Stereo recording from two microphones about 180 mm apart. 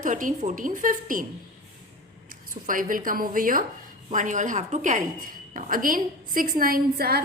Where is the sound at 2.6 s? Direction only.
50° right (ahead or behind).